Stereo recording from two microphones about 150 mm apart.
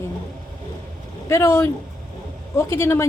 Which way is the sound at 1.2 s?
20° left (ahead or behind).